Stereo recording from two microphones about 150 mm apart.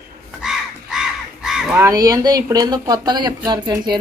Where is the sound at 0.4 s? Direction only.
5° right (ahead or behind).